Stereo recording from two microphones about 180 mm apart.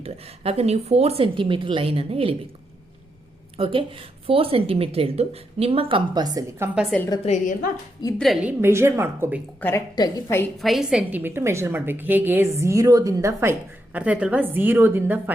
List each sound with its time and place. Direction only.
0.0 s a woman's voice: 35° right (ahead or behind)
3.6 s a woman's voice: 30° right (ahead or behind)
7.3 s a woman's voice: 45° left (ahead or behind)
8.2 s a woman's voice: 5° right (ahead or behind)
9.6 s a woman's voice: 10° left (ahead or behind)
10.6 s a woman's voice: centre (ahead or behind)